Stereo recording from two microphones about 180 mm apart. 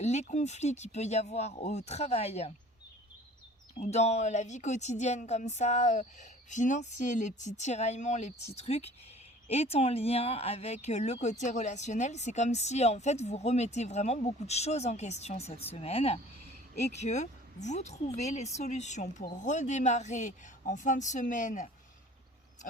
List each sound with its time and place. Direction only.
0.0 s speech: 40° left (ahead or behind)
3.8 s speech: 40° left (ahead or behind)